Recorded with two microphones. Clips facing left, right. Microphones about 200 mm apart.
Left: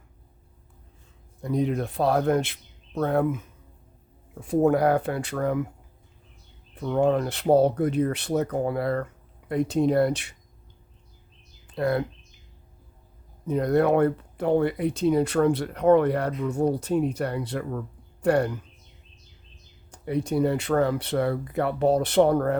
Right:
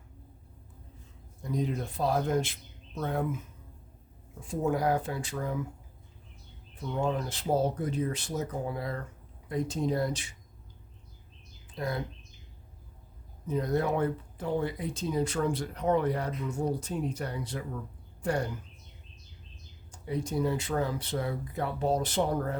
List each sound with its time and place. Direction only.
1.4 s speech: 65° left (ahead or behind)
6.7 s speech: 65° left (ahead or behind)
11.7 s speech: 65° left (ahead or behind)
13.5 s speech: 65° left (ahead or behind)
19.9 s speech: 65° left (ahead or behind)